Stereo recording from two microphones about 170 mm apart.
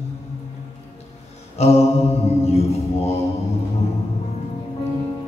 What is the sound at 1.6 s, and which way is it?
Mantra, 40° left (ahead or behind).